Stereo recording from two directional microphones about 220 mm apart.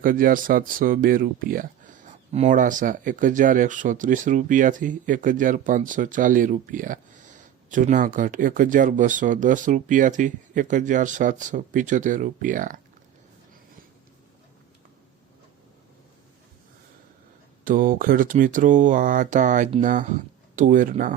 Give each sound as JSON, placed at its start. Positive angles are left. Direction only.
{"t": 0.0, "sound": "speech", "side_deg": -40}
{"t": 17.7, "sound": "speech", "side_deg": -40}